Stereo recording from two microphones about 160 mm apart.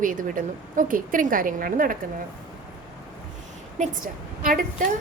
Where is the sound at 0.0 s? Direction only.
55° right (ahead or behind).